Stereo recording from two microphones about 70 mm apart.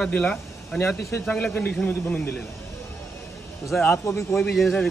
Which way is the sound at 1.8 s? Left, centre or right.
Left.